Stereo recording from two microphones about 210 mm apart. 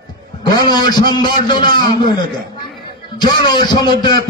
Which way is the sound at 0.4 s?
20° left (ahead or behind).